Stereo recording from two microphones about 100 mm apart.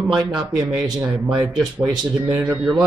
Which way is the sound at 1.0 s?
10° right (ahead or behind).